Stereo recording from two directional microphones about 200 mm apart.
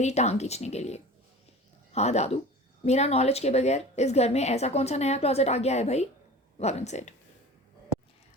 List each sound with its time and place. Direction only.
0.0 s a woman's voice: 35° left (ahead or behind)